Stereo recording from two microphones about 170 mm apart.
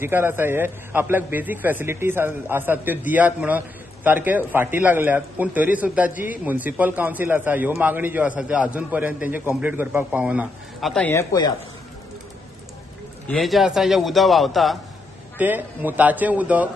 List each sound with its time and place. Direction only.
0.0 s a man's voice: 15° right (ahead or behind); by 11.2 s 10° left (ahead or behind)
13.3 s a man's voice: centre (ahead or behind)
15.3 s a man's voice: 10° right (ahead or behind)